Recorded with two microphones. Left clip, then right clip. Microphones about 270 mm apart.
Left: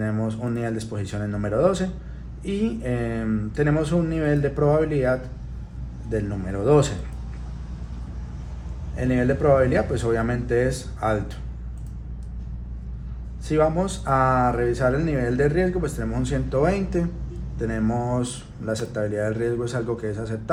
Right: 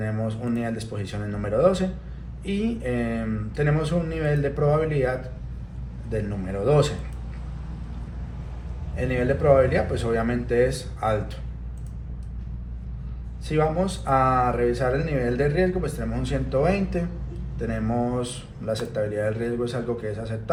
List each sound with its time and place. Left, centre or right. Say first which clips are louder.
0.0 s speech: left 2 dB; left
9.0 s speech: left 1 dB; left
13.5 s speech: left 2 dB; left